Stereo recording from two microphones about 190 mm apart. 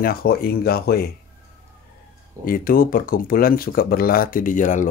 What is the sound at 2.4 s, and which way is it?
Speech, 50° left (ahead or behind).